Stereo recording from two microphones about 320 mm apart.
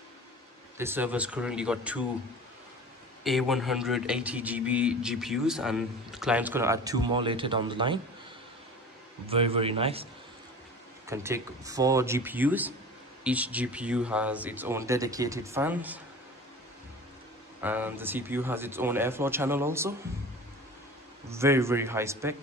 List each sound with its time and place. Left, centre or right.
0.7 s a man's voice: centre
3.3 s a man's voice: centre
9.3 s speech: centre
11.1 s a man's voice: centre
17.6 s speech: centre
21.3 s speech: centre